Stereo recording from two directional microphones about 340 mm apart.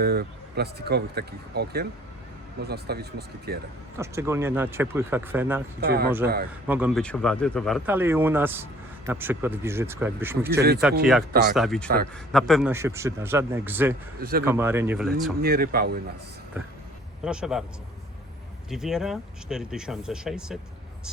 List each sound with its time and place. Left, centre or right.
0.0 s speech: right
3.9 s speech: centre
5.8 s speech: right
6.7 s speech: centre
14.2 s speech: right
14.4 s speech: centre
15.4 s speech: right
16.6 s speech: centre
18.7 s speech: centre